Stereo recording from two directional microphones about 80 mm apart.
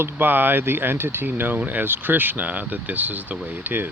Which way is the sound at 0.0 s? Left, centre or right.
Right.